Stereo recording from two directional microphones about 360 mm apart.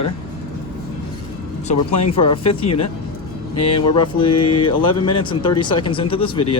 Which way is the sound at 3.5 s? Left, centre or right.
Left.